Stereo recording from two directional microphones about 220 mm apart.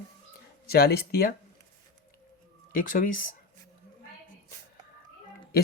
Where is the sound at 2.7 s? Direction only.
40° left (ahead or behind).